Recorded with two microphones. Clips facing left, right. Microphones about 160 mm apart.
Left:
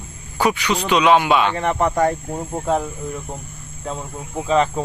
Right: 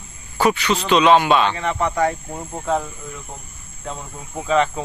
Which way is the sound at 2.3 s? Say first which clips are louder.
Left 2 dB; 20° left (ahead or behind).